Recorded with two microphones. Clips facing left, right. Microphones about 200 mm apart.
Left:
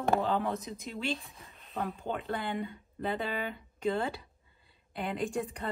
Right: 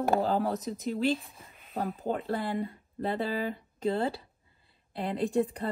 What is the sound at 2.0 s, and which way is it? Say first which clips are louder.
Speech: right 6 dB; 35° right (ahead or behind).